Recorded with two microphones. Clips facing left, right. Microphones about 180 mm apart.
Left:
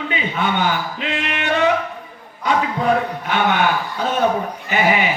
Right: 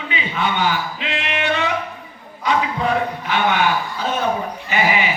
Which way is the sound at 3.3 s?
50° left (ahead or behind).